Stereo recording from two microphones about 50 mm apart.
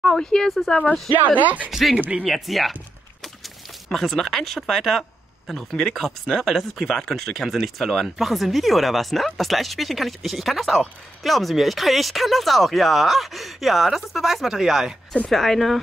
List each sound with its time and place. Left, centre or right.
0.0 s speech: centre
1.1 s speech: right
1.7 s speech: centre
3.2 s a sound: centre
5.5 s speech: centre
15.2 s speech: centre